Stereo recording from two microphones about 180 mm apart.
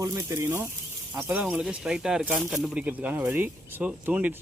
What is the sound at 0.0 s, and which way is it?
Speech, 15° right (ahead or behind).